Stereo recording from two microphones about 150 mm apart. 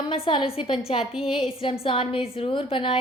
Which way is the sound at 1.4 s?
35° left (ahead or behind).